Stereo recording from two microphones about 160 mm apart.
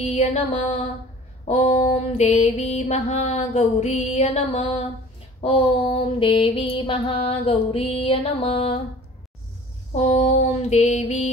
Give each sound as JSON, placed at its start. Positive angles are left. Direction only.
{"t": 0.0, "sound": "mantra", "side_deg": 40}
{"t": 9.9, "sound": "mantra", "side_deg": 45}